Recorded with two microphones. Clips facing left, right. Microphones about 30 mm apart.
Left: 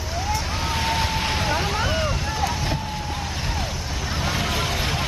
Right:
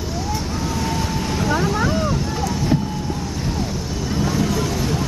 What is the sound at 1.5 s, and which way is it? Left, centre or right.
Vehicle, left.